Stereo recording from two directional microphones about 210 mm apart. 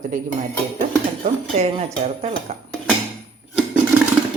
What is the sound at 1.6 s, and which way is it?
Speech, 30° right (ahead or behind).